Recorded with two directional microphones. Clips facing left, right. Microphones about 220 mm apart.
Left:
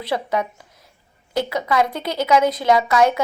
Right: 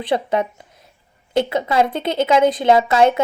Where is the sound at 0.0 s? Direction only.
20° right (ahead or behind).